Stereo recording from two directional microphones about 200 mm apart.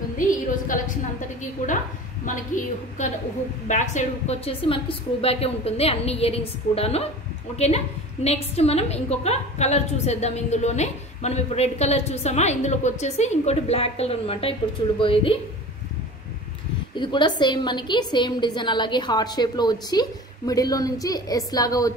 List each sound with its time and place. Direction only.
0.3 s a sound: 40° left (ahead or behind)
2.2 s a woman's voice: 40° left (ahead or behind)
16.9 s a woman's voice: 25° left (ahead or behind)